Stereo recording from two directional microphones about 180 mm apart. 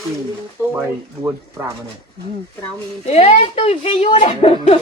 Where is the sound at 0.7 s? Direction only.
15° right (ahead or behind).